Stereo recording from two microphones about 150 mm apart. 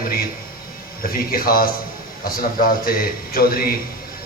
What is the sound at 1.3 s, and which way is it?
A man's voice, 75° left (ahead or behind).